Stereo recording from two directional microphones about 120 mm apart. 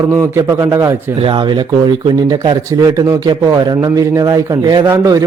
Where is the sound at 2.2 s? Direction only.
30° right (ahead or behind).